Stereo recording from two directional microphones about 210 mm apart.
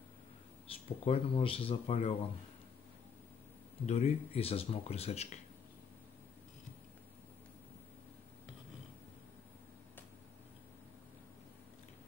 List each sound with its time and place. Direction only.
0.7 s speech: 25° left (ahead or behind)
3.8 s speech: 30° left (ahead or behind)